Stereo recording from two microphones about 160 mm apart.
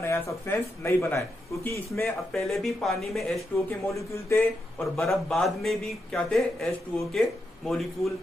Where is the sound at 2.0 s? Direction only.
Centre (ahead or behind).